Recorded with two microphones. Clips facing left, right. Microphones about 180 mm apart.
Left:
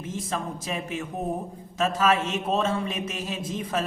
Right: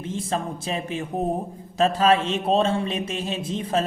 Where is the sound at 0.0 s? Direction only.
30° right (ahead or behind).